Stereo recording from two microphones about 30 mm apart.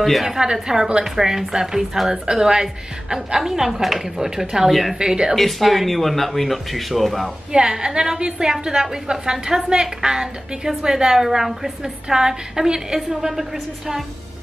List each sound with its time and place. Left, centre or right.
0.4 s a woman's voice: right
4.6 s speech: centre
4.9 s a woman's voice: right
5.3 s speech: centre
7.5 s a woman's voice: right